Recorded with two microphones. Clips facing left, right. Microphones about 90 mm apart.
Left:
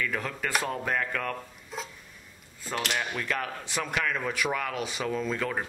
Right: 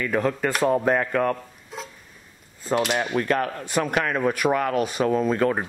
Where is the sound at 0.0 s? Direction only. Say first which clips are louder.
Right 8 dB; 40° right (ahead or behind).